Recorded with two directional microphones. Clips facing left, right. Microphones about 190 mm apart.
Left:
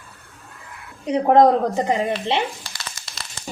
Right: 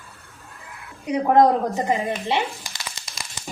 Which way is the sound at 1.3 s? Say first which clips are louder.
Left 2 dB; 20° left (ahead or behind).